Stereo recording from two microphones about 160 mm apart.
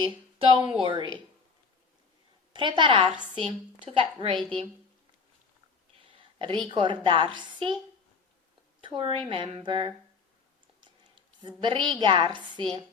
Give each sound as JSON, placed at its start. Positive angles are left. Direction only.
{"t": 0.0, "sound": "a woman's voice", "side_deg": -35}
{"t": 2.5, "sound": "a woman's voice", "side_deg": -30}
{"t": 6.1, "sound": "a sound", "side_deg": -30}
{"t": 6.7, "sound": "a woman's voice", "side_deg": -30}
{"t": 8.8, "sound": "a woman's voice", "side_deg": -30}
{"t": 11.4, "sound": "a woman's voice", "side_deg": -30}